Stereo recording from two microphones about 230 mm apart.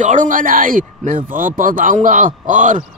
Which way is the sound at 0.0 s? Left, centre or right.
Right.